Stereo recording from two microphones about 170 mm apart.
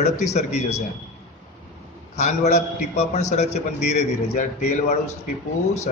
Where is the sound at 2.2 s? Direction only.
40° left (ahead or behind).